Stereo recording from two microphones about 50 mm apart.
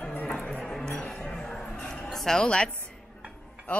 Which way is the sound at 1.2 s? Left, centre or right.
Centre.